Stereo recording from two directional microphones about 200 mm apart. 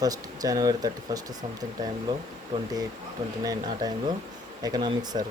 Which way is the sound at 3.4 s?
20° right (ahead or behind).